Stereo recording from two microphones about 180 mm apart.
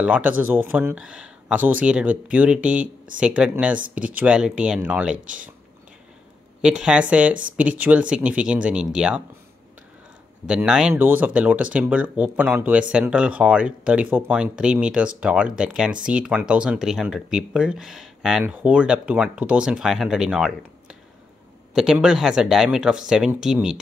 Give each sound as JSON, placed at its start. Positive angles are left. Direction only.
{"t": 0.0, "sound": "speech", "side_deg": -10}
{"t": 5.2, "sound": "speech", "side_deg": -45}
{"t": 6.6, "sound": "speech", "side_deg": -5}
{"t": 10.4, "sound": "speech", "side_deg": -5}
{"t": 21.7, "sound": "speech", "side_deg": -5}